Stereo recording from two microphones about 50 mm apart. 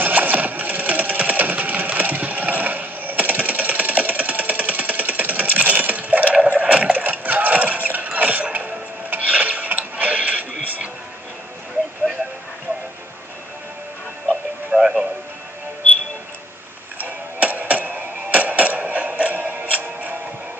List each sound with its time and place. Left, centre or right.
0.0 s sewing machine: right
8.5 s tick-tock: right
14.7 s music: centre
17.0 s music: right